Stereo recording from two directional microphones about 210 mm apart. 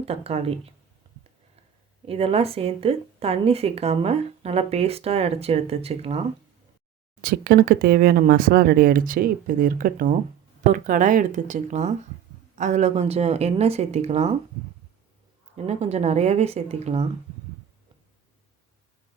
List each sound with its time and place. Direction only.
0.0 s speech: 30° right (ahead or behind)
2.0 s speech: 30° right (ahead or behind)
7.2 s speech: 45° right (ahead or behind)
15.5 s speech: 30° right (ahead or behind)